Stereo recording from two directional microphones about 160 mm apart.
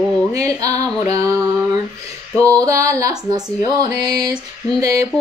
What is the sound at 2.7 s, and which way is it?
Speech, 20° right (ahead or behind).